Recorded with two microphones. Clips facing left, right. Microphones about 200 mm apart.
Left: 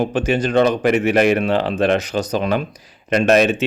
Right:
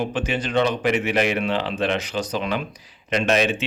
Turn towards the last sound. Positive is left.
turn(degrees=45)  # may be behind; listen again after turning